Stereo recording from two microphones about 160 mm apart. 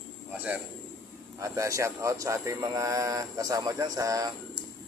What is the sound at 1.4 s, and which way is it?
Speech, 20° right (ahead or behind).